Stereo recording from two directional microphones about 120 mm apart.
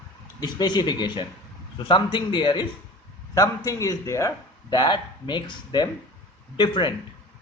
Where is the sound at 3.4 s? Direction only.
30° left (ahead or behind).